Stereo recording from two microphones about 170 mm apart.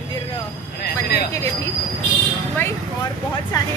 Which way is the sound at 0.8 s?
70° left (ahead or behind).